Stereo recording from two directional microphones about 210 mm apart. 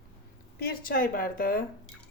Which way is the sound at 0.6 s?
45° left (ahead or behind).